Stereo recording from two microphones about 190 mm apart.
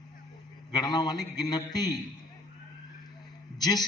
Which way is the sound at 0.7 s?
20° left (ahead or behind).